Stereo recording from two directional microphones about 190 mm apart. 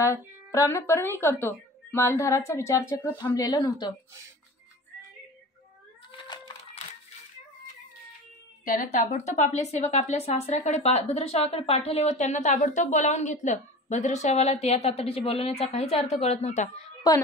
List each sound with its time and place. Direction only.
0.0 s a woman's voice: 15° left (ahead or behind)
6.1 s cat: 25° left (ahead or behind)
8.6 s speech: 40° left (ahead or behind)
17.1 s a woman's voice: 20° left (ahead or behind)